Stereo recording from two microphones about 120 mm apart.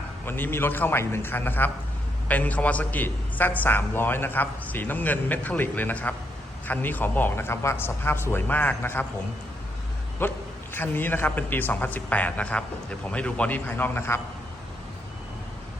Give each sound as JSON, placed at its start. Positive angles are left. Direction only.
{"t": 0.3, "sound": "a man's voice", "side_deg": 20}
{"t": 10.2, "sound": "a man's voice", "side_deg": 15}